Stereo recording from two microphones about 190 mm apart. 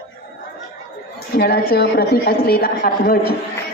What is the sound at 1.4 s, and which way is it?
Speech, 55° left (ahead or behind).